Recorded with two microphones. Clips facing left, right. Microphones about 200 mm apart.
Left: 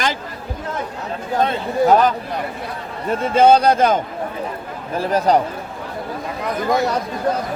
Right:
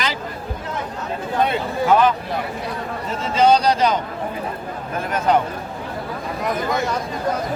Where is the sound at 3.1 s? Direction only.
55° left (ahead or behind).